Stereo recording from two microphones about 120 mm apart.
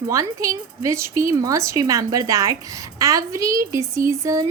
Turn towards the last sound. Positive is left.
turn(degrees=-25)  # may be behind; listen again after turning